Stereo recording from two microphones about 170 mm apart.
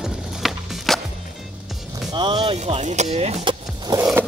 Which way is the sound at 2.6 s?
45° right (ahead or behind).